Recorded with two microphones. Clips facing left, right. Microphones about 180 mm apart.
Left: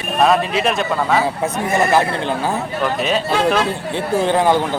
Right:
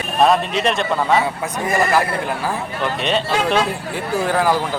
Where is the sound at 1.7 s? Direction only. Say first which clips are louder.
Left 1 dB; 25° left (ahead or behind).